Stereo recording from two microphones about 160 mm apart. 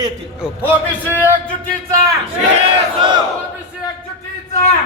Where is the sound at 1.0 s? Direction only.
15° right (ahead or behind).